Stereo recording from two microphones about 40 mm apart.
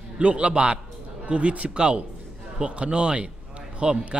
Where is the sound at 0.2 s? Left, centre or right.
Right.